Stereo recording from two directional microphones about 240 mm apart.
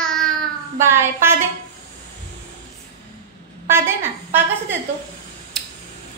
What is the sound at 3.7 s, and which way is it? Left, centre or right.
Speech, centre.